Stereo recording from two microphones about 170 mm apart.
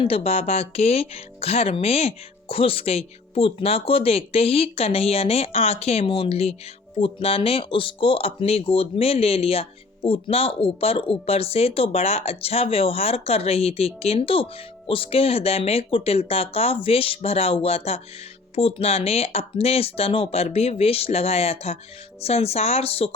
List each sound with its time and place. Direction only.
0.0 s speech: 35° left (ahead or behind)